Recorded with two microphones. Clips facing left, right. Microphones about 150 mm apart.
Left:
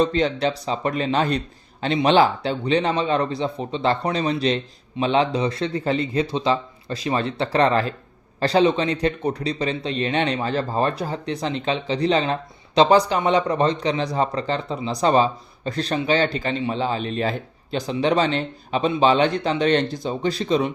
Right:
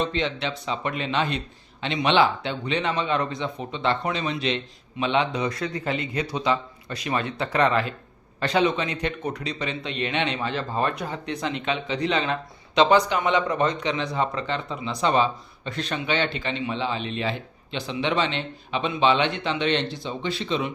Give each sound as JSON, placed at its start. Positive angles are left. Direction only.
{"t": 0.0, "sound": "a man's voice", "side_deg": 40}